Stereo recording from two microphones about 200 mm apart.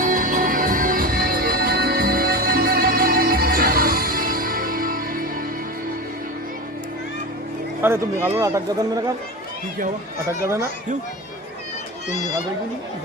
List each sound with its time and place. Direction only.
0.0 s music: 40° right (ahead or behind)
7.8 s speech: 10° right (ahead or behind)
10.2 s speech: 15° right (ahead or behind)